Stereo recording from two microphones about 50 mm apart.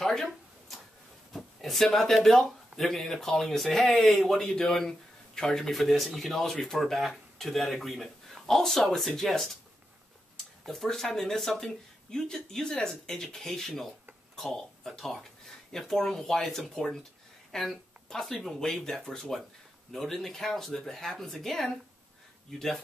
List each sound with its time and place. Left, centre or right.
0.0 s a sound: centre
1.9 s speech: centre
4.4 s speech: centre
5.7 s speech: centre